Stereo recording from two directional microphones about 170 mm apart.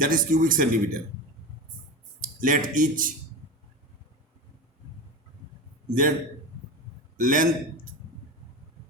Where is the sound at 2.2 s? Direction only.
50° right (ahead or behind).